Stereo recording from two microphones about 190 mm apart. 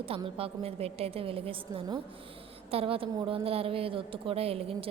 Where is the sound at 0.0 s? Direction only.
30° right (ahead or behind).